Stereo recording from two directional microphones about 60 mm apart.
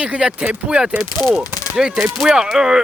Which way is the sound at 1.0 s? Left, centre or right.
Centre.